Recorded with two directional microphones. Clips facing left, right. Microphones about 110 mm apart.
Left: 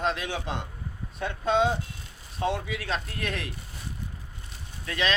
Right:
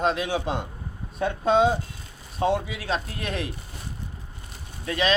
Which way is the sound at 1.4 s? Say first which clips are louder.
Right 4 dB; 40° right (ahead or behind).